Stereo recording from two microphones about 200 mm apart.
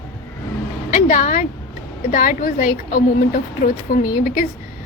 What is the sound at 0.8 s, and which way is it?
A woman's voice, 40° left (ahead or behind).